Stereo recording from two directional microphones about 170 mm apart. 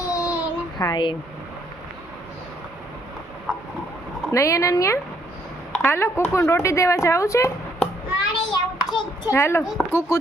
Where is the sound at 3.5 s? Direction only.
Centre (ahead or behind).